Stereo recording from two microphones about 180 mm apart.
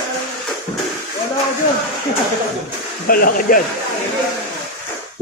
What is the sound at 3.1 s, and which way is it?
Speech, 55° left (ahead or behind).